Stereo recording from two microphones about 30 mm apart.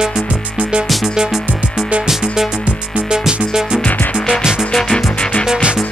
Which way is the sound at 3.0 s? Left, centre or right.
Right.